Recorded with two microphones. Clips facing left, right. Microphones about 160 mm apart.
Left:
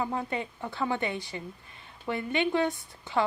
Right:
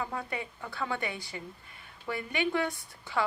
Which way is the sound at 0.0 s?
25° left (ahead or behind).